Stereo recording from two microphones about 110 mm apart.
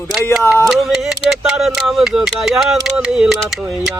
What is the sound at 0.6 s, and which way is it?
Speech, centre (ahead or behind).